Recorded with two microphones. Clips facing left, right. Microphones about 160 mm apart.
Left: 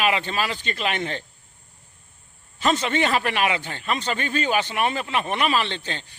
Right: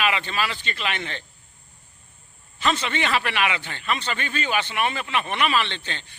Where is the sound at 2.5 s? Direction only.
40° left (ahead or behind).